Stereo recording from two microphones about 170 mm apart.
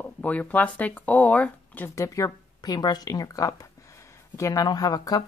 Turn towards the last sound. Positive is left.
turn(degrees=20)  # may be behind; listen again after turning